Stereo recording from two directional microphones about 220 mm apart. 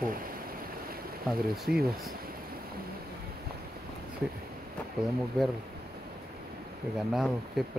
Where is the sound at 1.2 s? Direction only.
Centre (ahead or behind).